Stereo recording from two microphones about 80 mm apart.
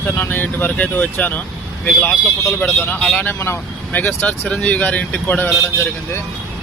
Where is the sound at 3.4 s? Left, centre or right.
Left.